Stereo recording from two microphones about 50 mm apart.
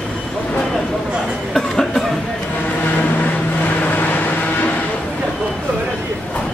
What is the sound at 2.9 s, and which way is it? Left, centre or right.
Vehicle, left.